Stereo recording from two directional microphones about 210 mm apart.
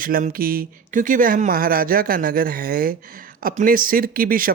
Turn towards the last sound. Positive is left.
turn(degrees=-40)  # may be behind; listen again after turning